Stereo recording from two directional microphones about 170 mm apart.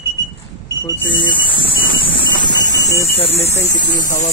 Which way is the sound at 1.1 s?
30° left (ahead or behind).